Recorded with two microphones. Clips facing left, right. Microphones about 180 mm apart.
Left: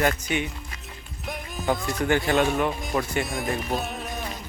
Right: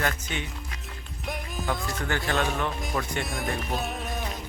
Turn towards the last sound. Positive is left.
turn(degrees=0)  # may be behind; listen again after turning